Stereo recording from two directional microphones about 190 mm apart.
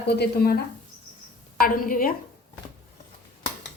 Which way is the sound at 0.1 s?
55° left (ahead or behind).